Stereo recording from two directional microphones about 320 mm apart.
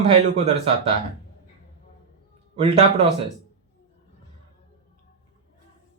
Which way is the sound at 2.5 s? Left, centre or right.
Centre.